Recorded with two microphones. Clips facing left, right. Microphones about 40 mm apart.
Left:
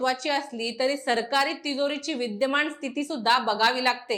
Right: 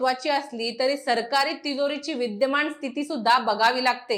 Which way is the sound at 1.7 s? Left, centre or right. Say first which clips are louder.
Right 1 dB; left.